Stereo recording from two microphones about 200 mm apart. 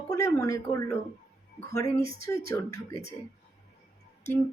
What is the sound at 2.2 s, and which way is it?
Speech, 15° left (ahead or behind).